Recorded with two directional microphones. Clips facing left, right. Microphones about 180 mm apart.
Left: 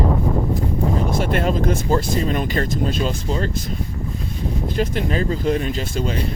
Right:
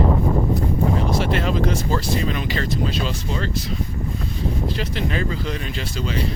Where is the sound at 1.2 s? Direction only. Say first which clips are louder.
Left 2 dB; 45° left (ahead or behind).